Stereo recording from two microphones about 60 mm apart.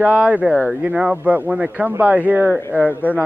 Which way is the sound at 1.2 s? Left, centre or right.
Right.